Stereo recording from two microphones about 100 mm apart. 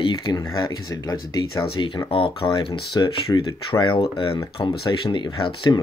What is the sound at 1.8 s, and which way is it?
Speech, 50° left (ahead or behind).